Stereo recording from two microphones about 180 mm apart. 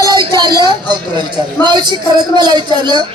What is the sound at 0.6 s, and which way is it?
A man's voice, 25° right (ahead or behind).